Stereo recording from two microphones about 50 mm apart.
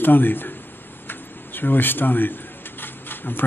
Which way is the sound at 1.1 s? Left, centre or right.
Left.